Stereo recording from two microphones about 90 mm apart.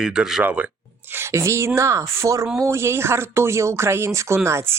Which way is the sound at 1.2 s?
30° right (ahead or behind).